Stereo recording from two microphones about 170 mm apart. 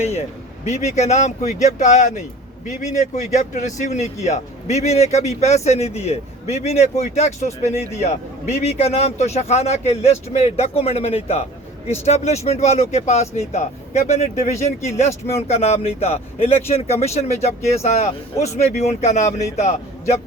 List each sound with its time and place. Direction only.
0.0 s speech: 40° left (ahead or behind)